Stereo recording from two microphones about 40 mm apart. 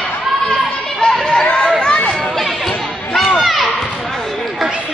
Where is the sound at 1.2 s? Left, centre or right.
Centre.